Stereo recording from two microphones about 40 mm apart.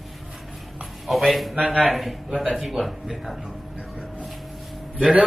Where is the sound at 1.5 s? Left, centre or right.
Right.